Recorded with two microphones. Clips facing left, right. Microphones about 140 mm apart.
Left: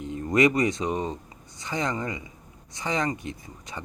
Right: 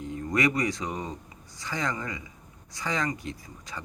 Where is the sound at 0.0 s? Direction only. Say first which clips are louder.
Left 5 dB; 20° left (ahead or behind).